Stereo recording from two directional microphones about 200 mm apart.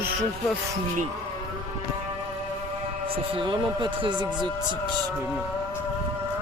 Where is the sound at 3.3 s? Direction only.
25° right (ahead or behind).